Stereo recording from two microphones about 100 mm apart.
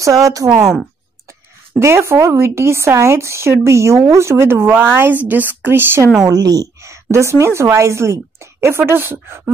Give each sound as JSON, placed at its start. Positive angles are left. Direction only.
{"t": 0.0, "sound": "speech", "side_deg": -35}
{"t": 0.5, "sound": "speech", "side_deg": -10}
{"t": 1.8, "sound": "speech", "side_deg": -25}
{"t": 6.2, "sound": "speech", "side_deg": -40}